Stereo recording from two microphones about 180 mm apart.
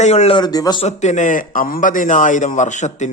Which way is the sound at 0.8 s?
40° left (ahead or behind).